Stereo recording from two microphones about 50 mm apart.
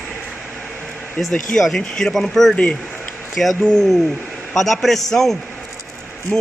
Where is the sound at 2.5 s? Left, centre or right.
Left.